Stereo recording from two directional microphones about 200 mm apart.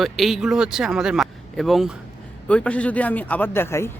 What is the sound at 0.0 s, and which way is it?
A woman's voice, centre (ahead or behind).